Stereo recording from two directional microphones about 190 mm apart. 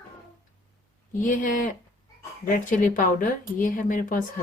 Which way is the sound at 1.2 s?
45° left (ahead or behind).